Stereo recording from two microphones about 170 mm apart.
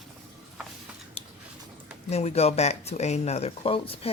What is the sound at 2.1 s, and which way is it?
Speech, 40° left (ahead or behind).